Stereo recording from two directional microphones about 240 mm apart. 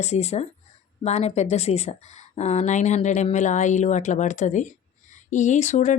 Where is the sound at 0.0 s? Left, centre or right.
Left.